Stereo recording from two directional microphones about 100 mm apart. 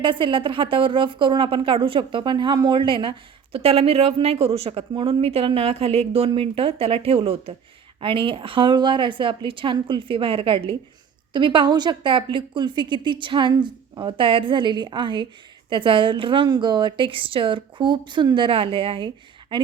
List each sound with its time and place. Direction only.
0.0 s a woman's voice: 55° right (ahead or behind); by 7.5 s 75° right (ahead or behind)
8.0 s a woman's voice: 60° right (ahead or behind)
11.3 s a woman's voice: 50° right (ahead or behind)